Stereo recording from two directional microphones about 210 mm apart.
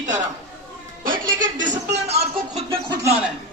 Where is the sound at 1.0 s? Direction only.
40° right (ahead or behind).